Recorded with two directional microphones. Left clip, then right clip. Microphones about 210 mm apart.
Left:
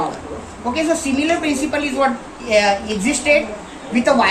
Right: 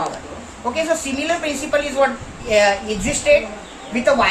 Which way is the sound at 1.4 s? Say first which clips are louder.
Even; 25° right (ahead or behind).